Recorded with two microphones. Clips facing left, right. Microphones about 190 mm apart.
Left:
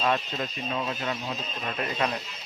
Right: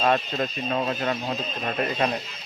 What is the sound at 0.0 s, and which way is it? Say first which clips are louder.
Speech: right 4 dB; 55° right (ahead or behind).